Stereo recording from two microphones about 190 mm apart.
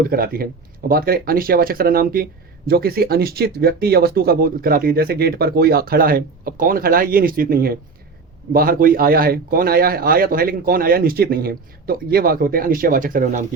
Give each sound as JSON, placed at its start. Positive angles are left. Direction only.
{"t": 0.0, "sound": "speech", "side_deg": -50}